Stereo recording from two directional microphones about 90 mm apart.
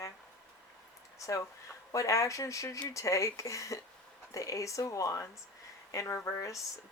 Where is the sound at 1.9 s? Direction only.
40° left (ahead or behind).